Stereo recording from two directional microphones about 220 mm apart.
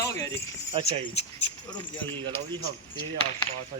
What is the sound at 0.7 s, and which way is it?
Speech, 25° right (ahead or behind).